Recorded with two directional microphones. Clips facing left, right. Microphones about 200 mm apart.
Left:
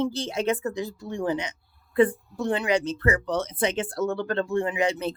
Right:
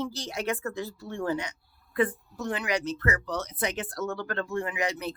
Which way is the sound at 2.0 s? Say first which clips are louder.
Left 6 dB; 30° left (ahead or behind).